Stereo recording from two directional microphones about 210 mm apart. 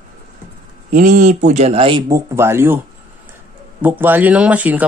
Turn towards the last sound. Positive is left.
turn(degrees=-5)  # may be behind; listen again after turning